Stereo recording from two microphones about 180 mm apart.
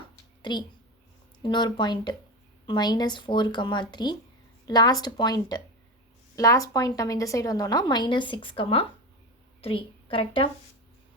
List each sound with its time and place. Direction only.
1.4 s a woman's voice: 25° left (ahead or behind)